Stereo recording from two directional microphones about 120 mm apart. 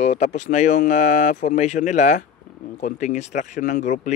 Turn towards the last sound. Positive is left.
turn(degrees=90)